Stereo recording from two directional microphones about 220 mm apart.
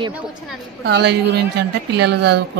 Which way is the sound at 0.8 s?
50° right (ahead or behind).